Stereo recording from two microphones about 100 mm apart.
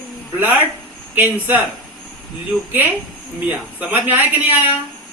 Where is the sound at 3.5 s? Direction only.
20° right (ahead or behind).